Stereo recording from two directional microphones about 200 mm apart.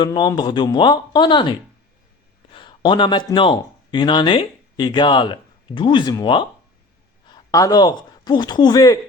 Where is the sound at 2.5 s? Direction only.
25° left (ahead or behind).